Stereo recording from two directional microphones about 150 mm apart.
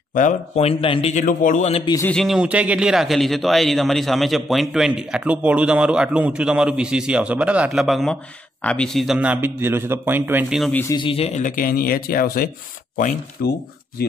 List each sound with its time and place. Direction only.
0.6 s speech: 40° left (ahead or behind)
1.1 s a man's voice: 60° left (ahead or behind)
2.0 s a man's voice: centre (ahead or behind); by 10.4 s 15° right (ahead or behind)
10.9 s speech: 35° left (ahead or behind); by 13.5 s 70° left (ahead or behind)